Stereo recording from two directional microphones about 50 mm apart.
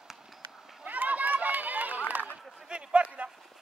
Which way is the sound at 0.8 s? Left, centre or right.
Right.